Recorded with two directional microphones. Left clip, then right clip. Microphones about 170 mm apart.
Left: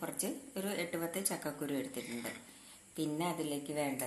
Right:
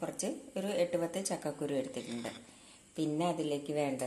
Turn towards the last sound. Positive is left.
turn(degrees=-50)  # may be behind; listen again after turning